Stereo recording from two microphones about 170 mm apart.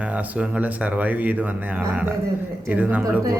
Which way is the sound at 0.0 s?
10° right (ahead or behind).